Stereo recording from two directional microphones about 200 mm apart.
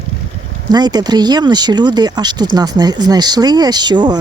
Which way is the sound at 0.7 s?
20° right (ahead or behind).